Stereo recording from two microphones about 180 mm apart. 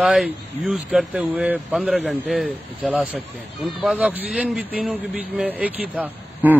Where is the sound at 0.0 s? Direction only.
Centre (ahead or behind).